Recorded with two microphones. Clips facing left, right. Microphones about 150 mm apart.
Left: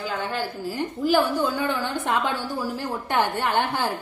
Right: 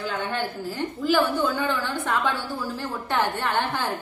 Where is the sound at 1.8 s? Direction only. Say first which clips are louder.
Left 1 dB; 20° left (ahead or behind).